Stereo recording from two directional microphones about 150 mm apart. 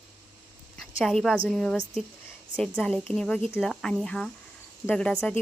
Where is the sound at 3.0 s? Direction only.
5° left (ahead or behind).